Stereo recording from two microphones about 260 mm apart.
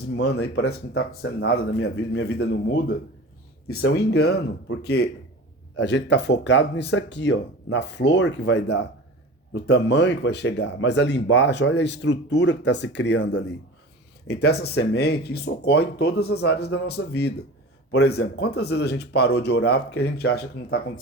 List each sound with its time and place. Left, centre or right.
0.6 s speech: left
3.7 s speech: left
3.9 s speech: left